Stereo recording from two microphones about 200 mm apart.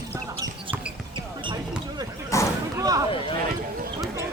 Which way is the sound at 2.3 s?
15° left (ahead or behind).